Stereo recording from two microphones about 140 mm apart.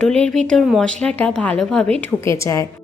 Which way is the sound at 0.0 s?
5° left (ahead or behind).